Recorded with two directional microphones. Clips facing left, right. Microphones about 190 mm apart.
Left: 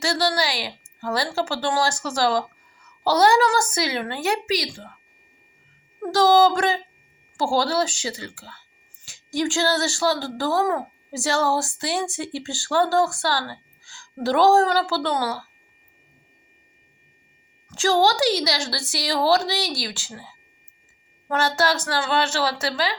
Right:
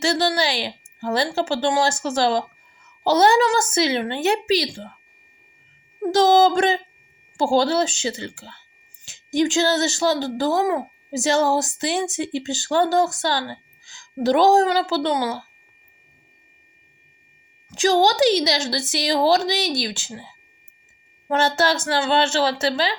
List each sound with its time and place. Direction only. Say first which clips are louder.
0.0 s a woman's voice: right 2 dB; 25° right (ahead or behind)
6.0 s a woman's voice: right 1 dB; 20° right (ahead or behind)
17.7 s a woman's voice: right 2 dB; 15° right (ahead or behind)